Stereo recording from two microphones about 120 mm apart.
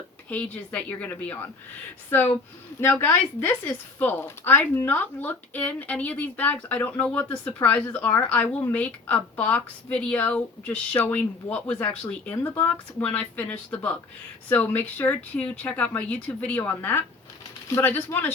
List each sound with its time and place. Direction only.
0.3 s speech: 15° left (ahead or behind)